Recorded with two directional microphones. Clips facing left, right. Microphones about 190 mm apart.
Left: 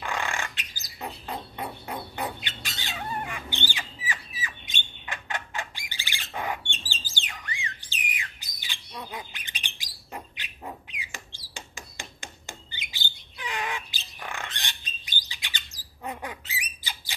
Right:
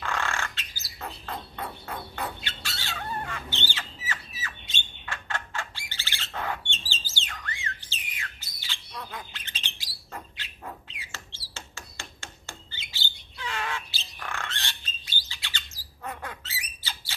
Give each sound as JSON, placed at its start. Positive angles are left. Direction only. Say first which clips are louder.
{"t": 0.0, "sound": "bird", "louder": "even", "side_deg": 15}
{"t": 4.4, "sound": "squawk", "louder": "left 1 dB", "side_deg": 15}
{"t": 9.8, "sound": "bird", "louder": "left 2 dB", "side_deg": 15}